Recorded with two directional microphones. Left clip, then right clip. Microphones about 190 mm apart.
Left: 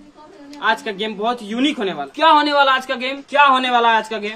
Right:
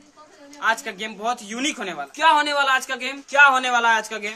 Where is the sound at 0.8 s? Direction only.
10° right (ahead or behind).